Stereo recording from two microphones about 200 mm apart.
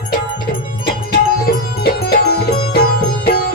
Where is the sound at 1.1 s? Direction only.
50° left (ahead or behind).